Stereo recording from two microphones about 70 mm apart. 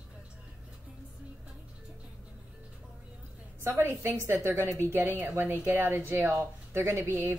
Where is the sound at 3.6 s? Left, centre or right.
Right.